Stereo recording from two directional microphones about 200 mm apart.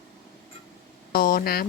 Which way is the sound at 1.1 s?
45° left (ahead or behind).